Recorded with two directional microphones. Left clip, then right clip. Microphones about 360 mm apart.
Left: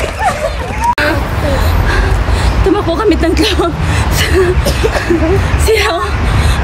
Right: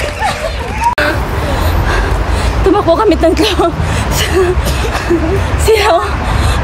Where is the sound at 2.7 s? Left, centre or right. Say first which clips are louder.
Right 4 dB; centre.